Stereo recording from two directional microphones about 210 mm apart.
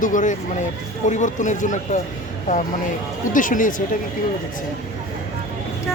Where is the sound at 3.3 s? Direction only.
40° left (ahead or behind).